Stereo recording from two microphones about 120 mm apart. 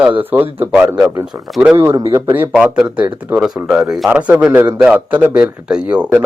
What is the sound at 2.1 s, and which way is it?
Speech, 15° right (ahead or behind).